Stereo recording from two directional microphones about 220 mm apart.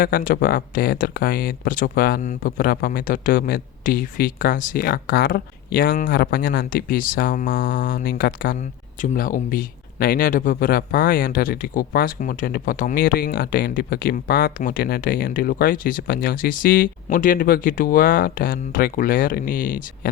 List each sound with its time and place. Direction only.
0.0 s speech: 40° left (ahead or behind)